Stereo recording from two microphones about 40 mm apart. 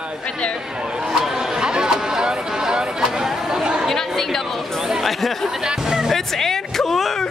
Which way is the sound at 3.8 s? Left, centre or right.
Centre.